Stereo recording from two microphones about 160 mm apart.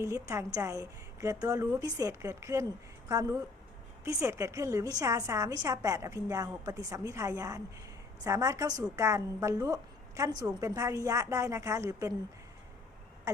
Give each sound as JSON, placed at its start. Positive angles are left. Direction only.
{"t": 0.0, "sound": "a woman's voice", "side_deg": -20}